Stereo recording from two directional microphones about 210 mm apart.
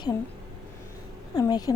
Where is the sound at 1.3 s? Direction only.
20° left (ahead or behind).